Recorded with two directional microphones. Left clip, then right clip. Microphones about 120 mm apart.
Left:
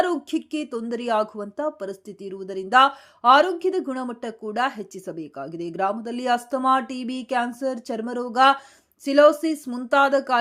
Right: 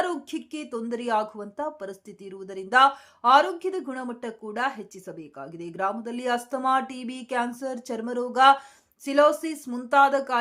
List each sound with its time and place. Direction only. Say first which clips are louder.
0.0 s speech: left 5 dB; 25° left (ahead or behind)